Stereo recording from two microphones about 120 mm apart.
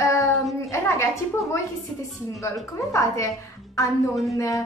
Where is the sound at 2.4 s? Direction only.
25° left (ahead or behind).